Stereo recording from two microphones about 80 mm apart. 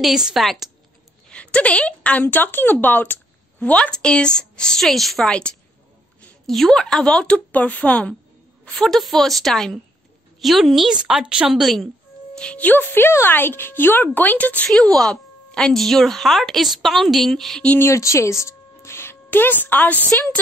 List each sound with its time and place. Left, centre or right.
0.0 s a woman's voice: centre
1.3 s a woman's voice: centre
6.4 s speech: centre
8.7 s a woman's voice: centre
12.4 s speech: centre
14.7 s a woman's voice: centre
17.7 s speech: left
18.4 s music: left